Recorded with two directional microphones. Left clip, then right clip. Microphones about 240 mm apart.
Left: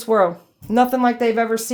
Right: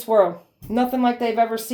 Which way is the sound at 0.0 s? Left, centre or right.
Left.